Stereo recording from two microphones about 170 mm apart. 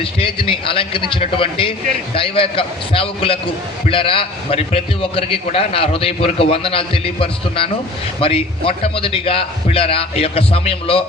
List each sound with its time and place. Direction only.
0.0 s a man's voice: 35° left (ahead or behind)